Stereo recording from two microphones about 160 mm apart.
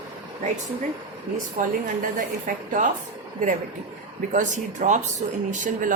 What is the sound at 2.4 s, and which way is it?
Speech, 55° right (ahead or behind).